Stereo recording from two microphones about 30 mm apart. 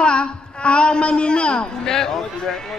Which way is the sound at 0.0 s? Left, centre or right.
Left.